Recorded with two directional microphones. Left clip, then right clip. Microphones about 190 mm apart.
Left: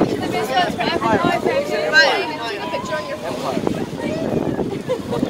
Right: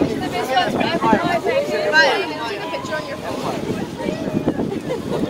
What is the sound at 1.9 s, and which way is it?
Speech, 55° left (ahead or behind).